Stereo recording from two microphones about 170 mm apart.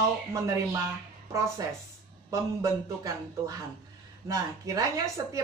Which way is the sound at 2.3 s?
20° right (ahead or behind).